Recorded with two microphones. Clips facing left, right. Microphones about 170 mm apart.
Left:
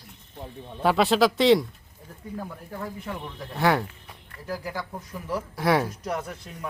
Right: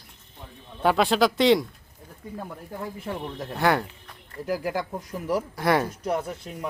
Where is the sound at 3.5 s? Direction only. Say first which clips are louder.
Even; centre (ahead or behind).